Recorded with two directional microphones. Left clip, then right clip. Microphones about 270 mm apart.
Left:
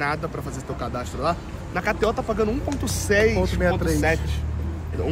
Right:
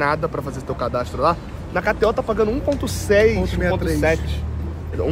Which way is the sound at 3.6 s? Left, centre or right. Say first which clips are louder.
Right 1 dB; centre.